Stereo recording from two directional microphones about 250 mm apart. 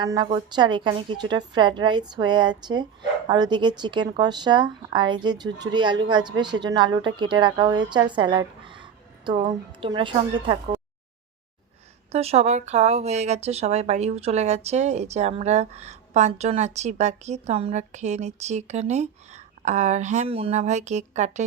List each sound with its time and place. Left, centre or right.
0.0 s a woman's voice: centre
12.1 s speech: right